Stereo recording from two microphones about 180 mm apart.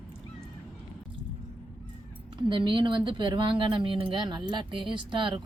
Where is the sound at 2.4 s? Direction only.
25° right (ahead or behind).